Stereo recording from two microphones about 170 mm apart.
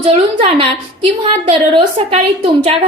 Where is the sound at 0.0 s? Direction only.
30° right (ahead or behind).